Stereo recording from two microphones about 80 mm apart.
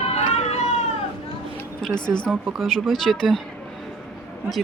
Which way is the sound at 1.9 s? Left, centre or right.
Left.